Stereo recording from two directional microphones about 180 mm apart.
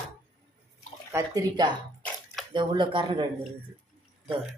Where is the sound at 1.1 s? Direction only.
20° right (ahead or behind).